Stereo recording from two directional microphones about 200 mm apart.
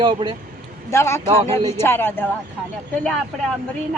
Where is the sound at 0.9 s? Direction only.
15° left (ahead or behind).